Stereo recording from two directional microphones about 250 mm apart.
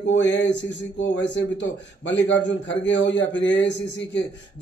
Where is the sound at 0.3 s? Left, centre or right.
Left.